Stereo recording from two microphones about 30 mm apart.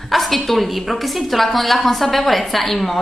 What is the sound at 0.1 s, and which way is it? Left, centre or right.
A woman's voice, centre.